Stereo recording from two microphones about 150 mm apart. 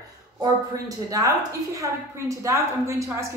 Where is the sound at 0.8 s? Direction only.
25° right (ahead or behind).